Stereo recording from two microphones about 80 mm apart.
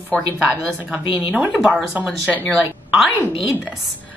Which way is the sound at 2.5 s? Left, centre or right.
Centre.